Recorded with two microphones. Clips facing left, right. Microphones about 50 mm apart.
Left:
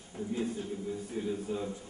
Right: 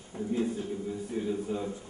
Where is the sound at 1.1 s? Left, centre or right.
Centre.